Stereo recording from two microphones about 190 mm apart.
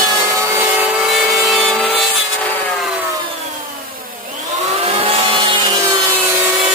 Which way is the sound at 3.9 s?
50° right (ahead or behind).